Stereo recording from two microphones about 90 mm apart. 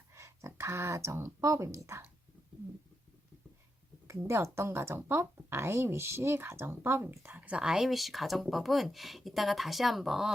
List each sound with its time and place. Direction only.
0.1 s speech: 30° right (ahead or behind)
4.0 s a woman's voice: 30° right (ahead or behind)
7.4 s speech: 10° right (ahead or behind)